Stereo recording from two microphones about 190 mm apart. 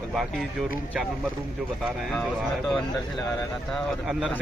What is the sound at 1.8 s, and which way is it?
Speech, centre (ahead or behind).